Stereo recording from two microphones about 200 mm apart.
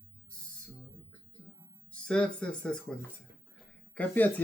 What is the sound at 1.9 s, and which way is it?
Speech, 5° left (ahead or behind).